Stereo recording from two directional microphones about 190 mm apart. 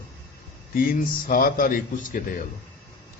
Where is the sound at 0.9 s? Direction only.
50° left (ahead or behind).